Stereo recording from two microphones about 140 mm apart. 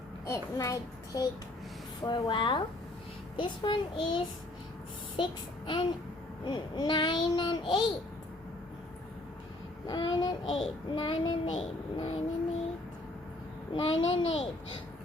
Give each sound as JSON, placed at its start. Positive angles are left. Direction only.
{"t": 0.3, "sound": "a child's voice", "side_deg": 25}
{"t": 5.1, "sound": "child singing", "side_deg": 35}
{"t": 6.4, "sound": "a child's voice", "side_deg": 35}
{"t": 9.8, "sound": "a child's voice", "side_deg": 30}
{"t": 13.7, "sound": "a child's voice", "side_deg": 40}